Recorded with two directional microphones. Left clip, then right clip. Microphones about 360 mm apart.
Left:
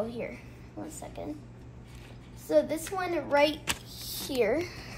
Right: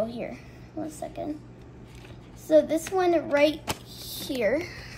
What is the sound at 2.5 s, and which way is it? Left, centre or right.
A woman's voice, centre.